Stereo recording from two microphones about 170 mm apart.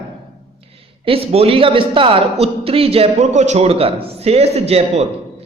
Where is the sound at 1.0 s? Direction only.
35° right (ahead or behind).